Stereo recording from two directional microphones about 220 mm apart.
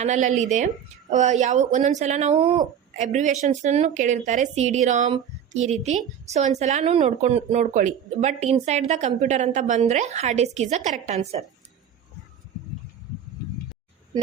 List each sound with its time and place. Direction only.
0.0 s speech: 35° right (ahead or behind)